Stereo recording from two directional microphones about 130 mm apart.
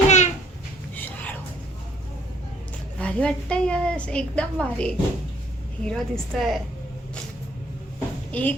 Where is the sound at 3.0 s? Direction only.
10° left (ahead or behind).